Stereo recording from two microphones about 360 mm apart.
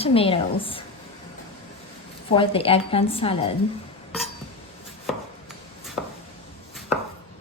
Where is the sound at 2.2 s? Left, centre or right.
Centre.